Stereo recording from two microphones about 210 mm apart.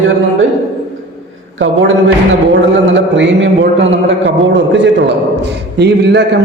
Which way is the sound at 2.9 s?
60° right (ahead or behind).